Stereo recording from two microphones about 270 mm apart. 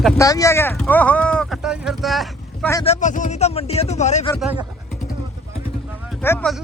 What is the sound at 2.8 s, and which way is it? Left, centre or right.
Speech, left.